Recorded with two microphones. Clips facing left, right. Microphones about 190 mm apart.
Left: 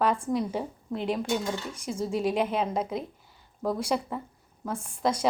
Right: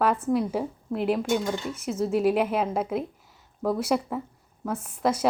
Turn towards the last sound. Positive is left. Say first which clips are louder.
# right 2 dB
turn(degrees=-5)  # may be behind; listen again after turning